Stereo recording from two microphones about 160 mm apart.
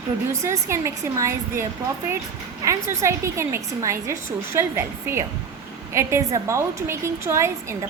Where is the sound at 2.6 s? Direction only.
20° right (ahead or behind).